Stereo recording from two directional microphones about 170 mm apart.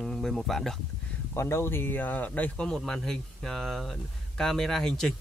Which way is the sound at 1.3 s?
15° left (ahead or behind).